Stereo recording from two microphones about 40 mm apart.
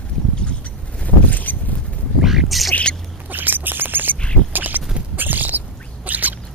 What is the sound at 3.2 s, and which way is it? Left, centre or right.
Bird, right.